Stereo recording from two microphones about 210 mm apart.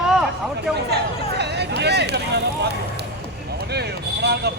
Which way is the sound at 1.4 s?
55° right (ahead or behind).